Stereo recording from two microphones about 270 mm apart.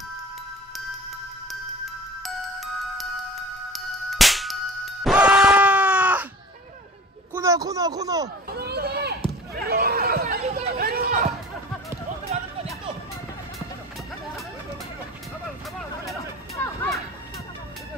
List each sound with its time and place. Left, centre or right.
2.2 s music: centre
5.0 s a sound: centre
7.3 s a sound: centre
8.5 s hubbub: right
9.7 s chatter: right
10.4 s chatter: right
10.7 s chatter: right
16.5 s music: centre